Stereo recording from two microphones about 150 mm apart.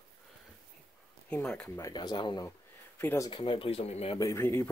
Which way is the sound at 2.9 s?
15° left (ahead or behind).